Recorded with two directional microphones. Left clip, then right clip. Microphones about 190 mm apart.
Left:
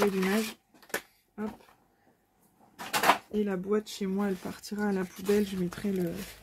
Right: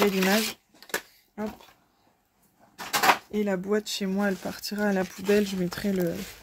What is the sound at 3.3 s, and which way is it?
Speech, 60° right (ahead or behind).